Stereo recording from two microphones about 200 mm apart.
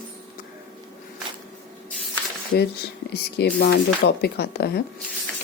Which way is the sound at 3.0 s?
55° left (ahead or behind).